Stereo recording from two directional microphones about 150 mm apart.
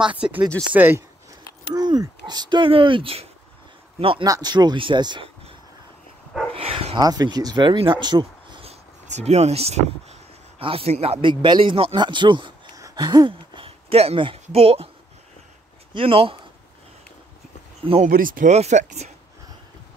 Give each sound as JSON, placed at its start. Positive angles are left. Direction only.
{"t": 0.0, "sound": "speech", "side_deg": -10}
{"t": 1.7, "sound": "speech", "side_deg": -25}
{"t": 4.3, "sound": "speech", "side_deg": -25}
{"t": 6.5, "sound": "speech", "side_deg": -40}
{"t": 7.0, "sound": "speech", "side_deg": -25}
{"t": 8.6, "sound": "a sound", "side_deg": -45}
{"t": 10.6, "sound": "speech", "side_deg": -40}
{"t": 13.7, "sound": "speech", "side_deg": -40}
{"t": 15.9, "sound": "speech", "side_deg": -35}
{"t": 18.0, "sound": "speech", "side_deg": -70}
{"t": 18.5, "sound": "speech", "side_deg": -50}